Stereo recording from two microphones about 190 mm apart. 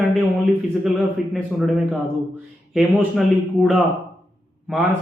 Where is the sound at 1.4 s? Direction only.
5° right (ahead or behind).